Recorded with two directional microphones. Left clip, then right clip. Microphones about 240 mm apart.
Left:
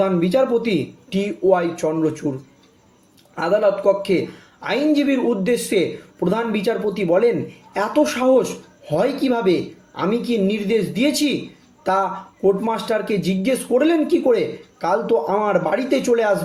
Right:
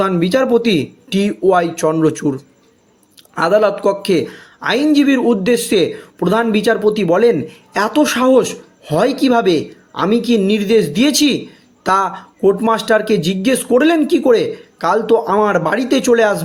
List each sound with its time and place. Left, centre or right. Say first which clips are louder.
0.0 s speech: right 3 dB; right
3.3 s speech: right 5 dB; right